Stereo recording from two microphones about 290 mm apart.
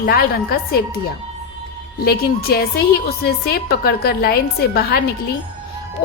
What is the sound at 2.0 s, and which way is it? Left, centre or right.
A woman's voice, left.